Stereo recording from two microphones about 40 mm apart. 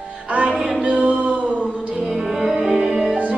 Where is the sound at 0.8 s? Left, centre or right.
Right.